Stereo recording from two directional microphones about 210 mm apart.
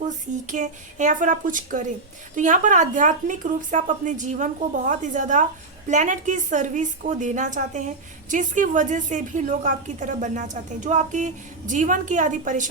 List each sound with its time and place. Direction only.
0.4 s a woman's voice: 35° right (ahead or behind)